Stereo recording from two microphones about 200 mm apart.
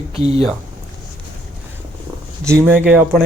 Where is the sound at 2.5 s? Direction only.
10° right (ahead or behind).